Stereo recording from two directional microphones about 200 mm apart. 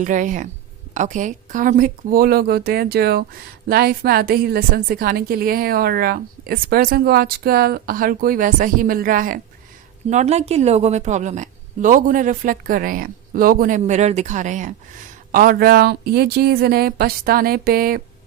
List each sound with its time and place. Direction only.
0.0 s a woman's voice: 40° right (ahead or behind)